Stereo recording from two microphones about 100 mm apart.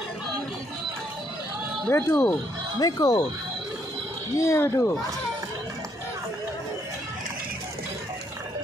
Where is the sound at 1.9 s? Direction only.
25° left (ahead or behind).